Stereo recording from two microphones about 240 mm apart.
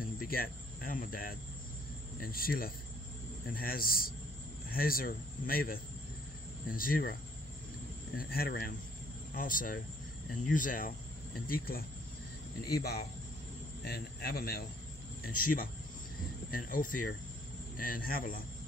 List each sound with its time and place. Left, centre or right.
0.2 s speech: left
8.2 s speech: left